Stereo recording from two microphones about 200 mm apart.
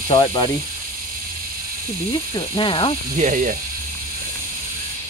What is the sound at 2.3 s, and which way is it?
Speech, 25° left (ahead or behind).